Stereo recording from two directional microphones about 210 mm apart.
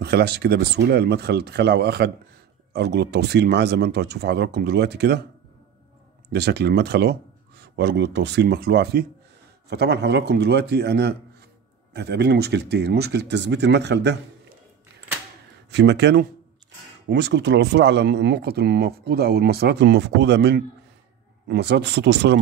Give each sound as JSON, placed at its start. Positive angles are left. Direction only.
{"t": 0.0, "sound": "speech", "side_deg": -50}
{"t": 6.3, "sound": "speech", "side_deg": -50}
{"t": 15.7, "sound": "speech", "side_deg": -55}